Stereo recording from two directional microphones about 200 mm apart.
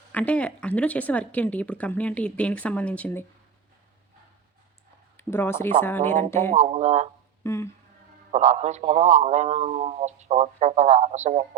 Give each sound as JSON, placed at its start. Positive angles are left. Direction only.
{"t": 0.1, "sound": "a woman's voice", "side_deg": 5}
{"t": 5.1, "sound": "a woman's voice", "side_deg": 10}
{"t": 6.5, "sound": "a man's voice", "side_deg": -35}
{"t": 7.4, "sound": "speech", "side_deg": 15}
{"t": 8.3, "sound": "a man's voice", "side_deg": -35}